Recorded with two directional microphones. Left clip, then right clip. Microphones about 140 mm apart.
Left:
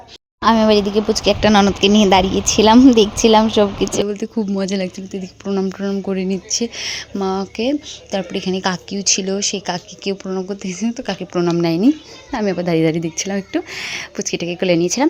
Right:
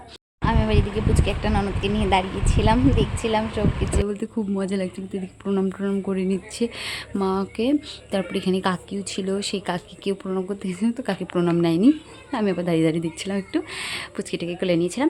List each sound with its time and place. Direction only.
0.4 s speech: 55° left (ahead or behind)
4.0 s speech: 15° left (ahead or behind)
5.5 s speech: 5° left (ahead or behind)
6.1 s speech: 20° left (ahead or behind)
9.5 s speech: 10° left (ahead or behind)
11.4 s speech: 20° left (ahead or behind)
14.3 s speech: 25° left (ahead or behind)